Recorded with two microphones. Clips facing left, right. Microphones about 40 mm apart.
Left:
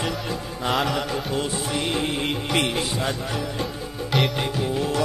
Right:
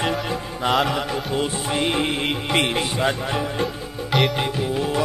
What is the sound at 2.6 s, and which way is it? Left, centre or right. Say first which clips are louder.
Music: right 3 dB; right.